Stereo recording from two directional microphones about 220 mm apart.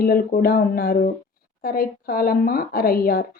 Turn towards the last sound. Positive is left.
turn(degrees=40)  # may be behind; listen again after turning